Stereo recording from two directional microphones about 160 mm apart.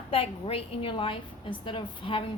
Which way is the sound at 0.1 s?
35° left (ahead or behind).